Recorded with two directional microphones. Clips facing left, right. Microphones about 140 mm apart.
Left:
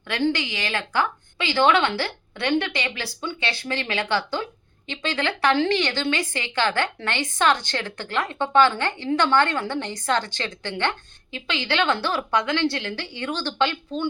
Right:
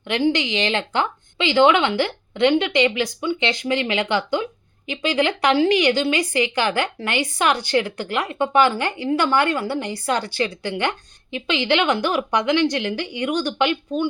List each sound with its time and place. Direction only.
0.1 s a woman's voice: 15° right (ahead or behind)